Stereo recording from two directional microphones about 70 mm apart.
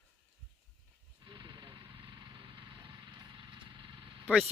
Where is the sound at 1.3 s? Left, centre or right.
Right.